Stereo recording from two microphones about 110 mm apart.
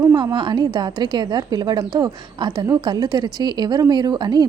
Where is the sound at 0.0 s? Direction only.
40° right (ahead or behind).